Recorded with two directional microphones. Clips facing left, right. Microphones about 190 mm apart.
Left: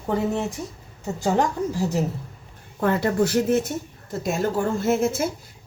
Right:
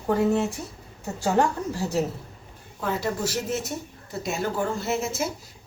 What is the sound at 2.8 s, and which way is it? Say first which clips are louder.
A woman's voice: left 6 dB; 60° left (ahead or behind).